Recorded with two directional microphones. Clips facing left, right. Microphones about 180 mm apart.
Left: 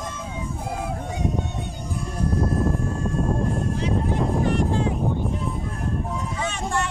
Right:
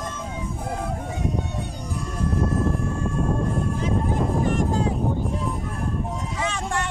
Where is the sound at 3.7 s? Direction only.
45° right (ahead or behind).